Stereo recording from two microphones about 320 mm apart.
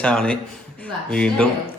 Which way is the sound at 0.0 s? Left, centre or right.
Centre.